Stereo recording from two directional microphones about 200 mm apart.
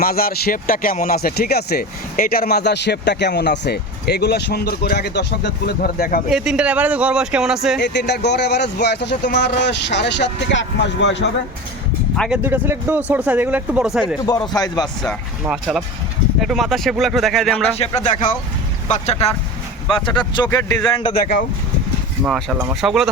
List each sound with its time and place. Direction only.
0.0 s speech: 50° left (ahead or behind)
6.2 s speech: 5° right (ahead or behind)
7.8 s speech: 60° left (ahead or behind)
12.1 s speech: 5° left (ahead or behind)
12.4 s speech: 10° right (ahead or behind)
14.3 s speech: 20° left (ahead or behind)
15.0 s speech: 5° right (ahead or behind)
17.7 s speech: 35° left (ahead or behind)
20.1 s speech: 25° left (ahead or behind)
20.5 s speech: 10° left (ahead or behind)
20.9 s speech: 25° left (ahead or behind)
22.2 s speech: centre (ahead or behind)